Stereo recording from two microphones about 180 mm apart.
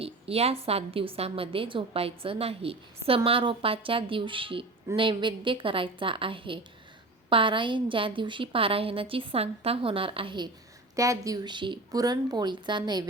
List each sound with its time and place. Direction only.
0.0 s a woman's voice: 35° right (ahead or behind)